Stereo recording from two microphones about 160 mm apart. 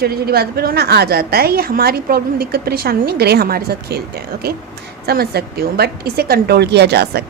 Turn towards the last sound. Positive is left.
turn(degrees=-90)